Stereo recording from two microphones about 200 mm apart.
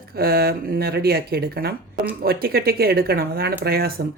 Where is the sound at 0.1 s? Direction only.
50° right (ahead or behind).